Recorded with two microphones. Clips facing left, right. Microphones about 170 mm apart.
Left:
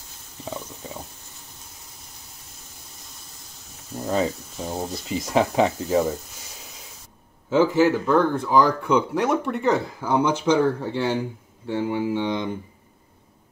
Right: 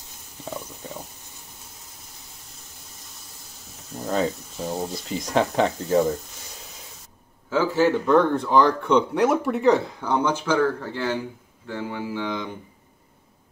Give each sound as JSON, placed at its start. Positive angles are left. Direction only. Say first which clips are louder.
{"t": 3.9, "sound": "speech", "louder": "left 1 dB", "side_deg": 0}
{"t": 7.7, "sound": "speech", "louder": "even", "side_deg": 5}